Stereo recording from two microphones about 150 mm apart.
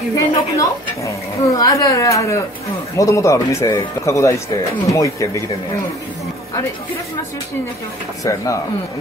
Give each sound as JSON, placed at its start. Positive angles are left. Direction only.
{"t": 0.1, "sound": "a man's voice", "side_deg": 20}
{"t": 8.2, "sound": "a man's voice", "side_deg": 20}